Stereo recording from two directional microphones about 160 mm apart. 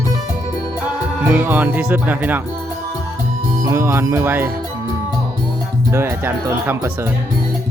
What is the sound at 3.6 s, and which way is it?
Speech, 15° right (ahead or behind).